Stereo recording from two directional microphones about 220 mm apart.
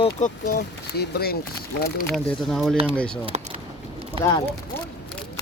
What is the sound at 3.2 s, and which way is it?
Speech, 30° right (ahead or behind).